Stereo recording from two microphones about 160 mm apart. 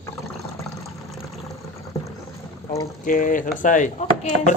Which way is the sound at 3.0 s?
60° left (ahead or behind).